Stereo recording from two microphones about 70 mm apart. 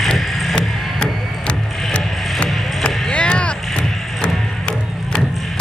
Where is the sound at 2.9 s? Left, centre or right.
Centre.